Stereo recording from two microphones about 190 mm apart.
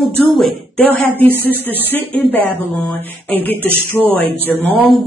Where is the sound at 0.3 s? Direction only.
5° left (ahead or behind).